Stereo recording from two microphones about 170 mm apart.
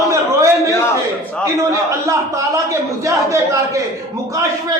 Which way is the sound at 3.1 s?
20° right (ahead or behind).